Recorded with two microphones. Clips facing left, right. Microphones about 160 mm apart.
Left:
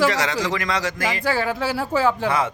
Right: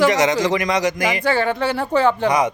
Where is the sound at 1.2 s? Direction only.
Centre (ahead or behind).